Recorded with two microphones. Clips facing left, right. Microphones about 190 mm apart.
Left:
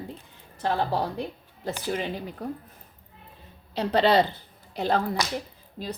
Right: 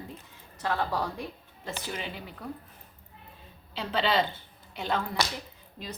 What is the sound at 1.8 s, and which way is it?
Speech, 35° left (ahead or behind).